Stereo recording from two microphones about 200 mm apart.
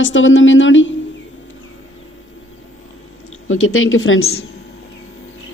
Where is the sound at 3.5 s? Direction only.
90° left.